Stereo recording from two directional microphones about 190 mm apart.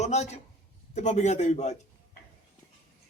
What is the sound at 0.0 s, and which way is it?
A man's voice, 35° left (ahead or behind).